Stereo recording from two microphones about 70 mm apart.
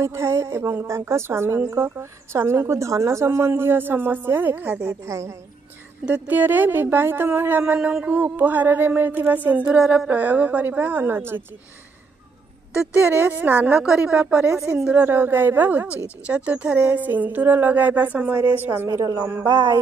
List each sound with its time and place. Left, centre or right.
0.0 s speech: right
5.0 s a woman's voice: right
6.0 s speech: right
13.0 s speech: right
13.8 s a woman's voice: centre
15.0 s speech: right
18.9 s speech: right